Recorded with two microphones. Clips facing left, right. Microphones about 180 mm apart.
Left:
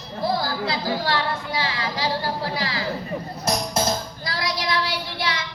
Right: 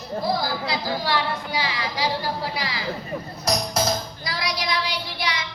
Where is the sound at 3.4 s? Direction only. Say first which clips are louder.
Even; 25° left (ahead or behind).